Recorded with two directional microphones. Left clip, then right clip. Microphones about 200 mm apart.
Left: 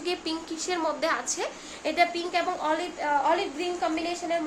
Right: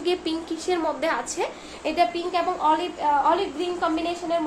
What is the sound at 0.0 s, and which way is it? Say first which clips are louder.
A woman's voice: right 5 dB; centre (ahead or behind).